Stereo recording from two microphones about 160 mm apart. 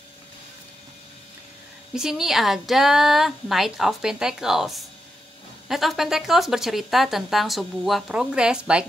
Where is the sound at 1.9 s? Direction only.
5° right (ahead or behind).